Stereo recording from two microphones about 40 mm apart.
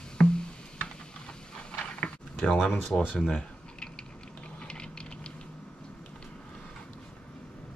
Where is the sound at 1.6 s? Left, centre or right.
Left.